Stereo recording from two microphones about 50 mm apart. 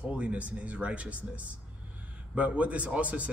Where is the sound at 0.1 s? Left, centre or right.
Right.